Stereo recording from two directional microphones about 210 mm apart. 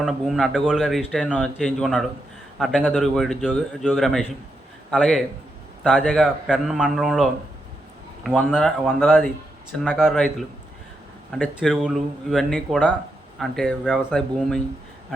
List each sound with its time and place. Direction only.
0.0 s speech: centre (ahead or behind)